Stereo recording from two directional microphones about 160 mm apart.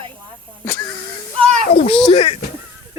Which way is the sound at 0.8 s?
25° left (ahead or behind).